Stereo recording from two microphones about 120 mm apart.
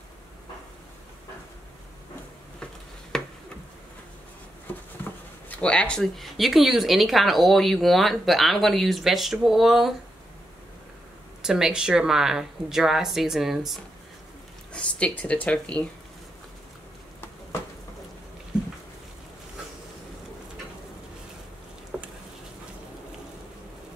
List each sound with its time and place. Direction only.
3.1 s tick-tock: 5° left (ahead or behind)
5.0 s a sound: 20° left (ahead or behind)
5.5 s speech: 10° left (ahead or behind)
11.4 s speech: 5° right (ahead or behind)
14.7 s speech: 10° left (ahead or behind)
21.9 s a sound: 5° right (ahead or behind)